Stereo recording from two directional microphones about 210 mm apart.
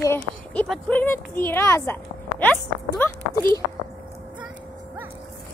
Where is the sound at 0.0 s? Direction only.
10° left (ahead or behind).